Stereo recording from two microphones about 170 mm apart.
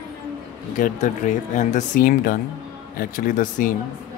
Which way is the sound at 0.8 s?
45° left (ahead or behind).